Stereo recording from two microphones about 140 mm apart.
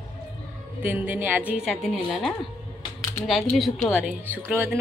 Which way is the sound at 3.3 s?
Centre (ahead or behind).